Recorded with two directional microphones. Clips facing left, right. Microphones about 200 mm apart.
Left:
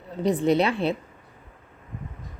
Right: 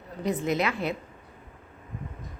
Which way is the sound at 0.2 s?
35° left (ahead or behind).